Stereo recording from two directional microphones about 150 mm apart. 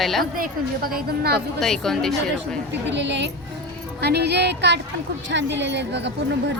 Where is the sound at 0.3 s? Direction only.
75° right (ahead or behind).